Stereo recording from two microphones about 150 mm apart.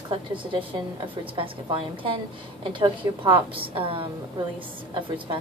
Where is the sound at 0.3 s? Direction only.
35° right (ahead or behind).